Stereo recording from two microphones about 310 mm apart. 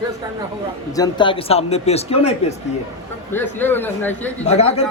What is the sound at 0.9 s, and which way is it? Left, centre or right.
Speech, centre.